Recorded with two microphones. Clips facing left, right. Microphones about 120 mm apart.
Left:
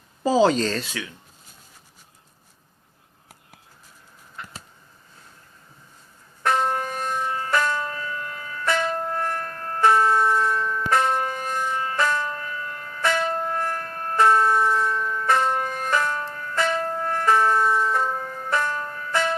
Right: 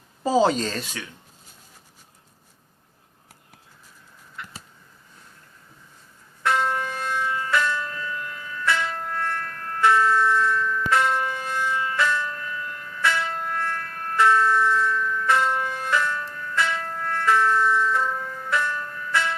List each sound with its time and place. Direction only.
0.4 s speech: 10° right (ahead or behind)
6.4 s church bell: 45° left (ahead or behind)